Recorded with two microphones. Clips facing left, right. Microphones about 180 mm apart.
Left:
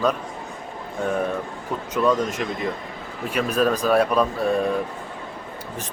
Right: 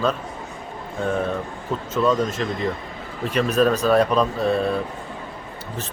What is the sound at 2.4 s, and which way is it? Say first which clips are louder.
Speech: right 2 dB; 10° left (ahead or behind).